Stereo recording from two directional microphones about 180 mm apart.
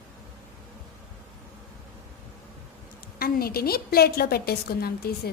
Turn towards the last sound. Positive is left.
turn(degrees=60)  # may be behind; listen again after turning